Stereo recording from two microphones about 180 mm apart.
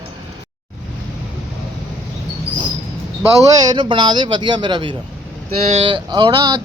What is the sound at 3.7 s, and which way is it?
Speech, 25° right (ahead or behind).